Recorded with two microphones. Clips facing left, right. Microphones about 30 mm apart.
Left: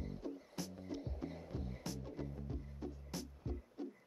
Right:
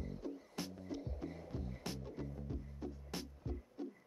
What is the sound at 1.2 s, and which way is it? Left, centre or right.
Music, left.